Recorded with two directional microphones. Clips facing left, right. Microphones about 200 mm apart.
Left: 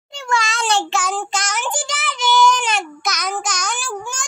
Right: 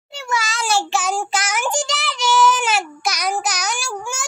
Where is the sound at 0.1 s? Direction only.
5° right (ahead or behind).